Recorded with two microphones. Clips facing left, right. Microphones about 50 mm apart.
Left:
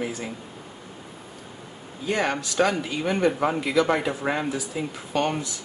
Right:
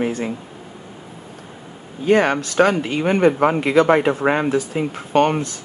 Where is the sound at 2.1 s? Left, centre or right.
Right.